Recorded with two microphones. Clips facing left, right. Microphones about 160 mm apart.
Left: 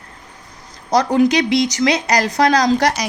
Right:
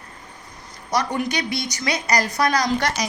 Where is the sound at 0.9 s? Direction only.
90° left.